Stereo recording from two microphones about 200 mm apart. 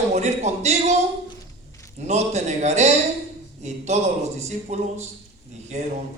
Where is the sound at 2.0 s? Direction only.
35° right (ahead or behind).